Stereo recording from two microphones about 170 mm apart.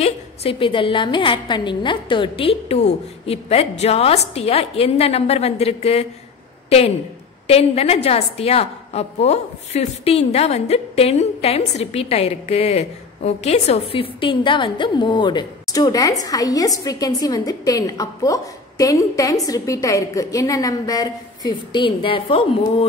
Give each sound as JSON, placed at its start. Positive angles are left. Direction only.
{"t": 0.0, "sound": "a woman's voice", "side_deg": 35}
{"t": 7.4, "sound": "a woman's voice", "side_deg": 35}